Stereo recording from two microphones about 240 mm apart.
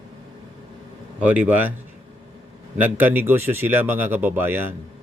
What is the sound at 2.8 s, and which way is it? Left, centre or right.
A man's voice, centre.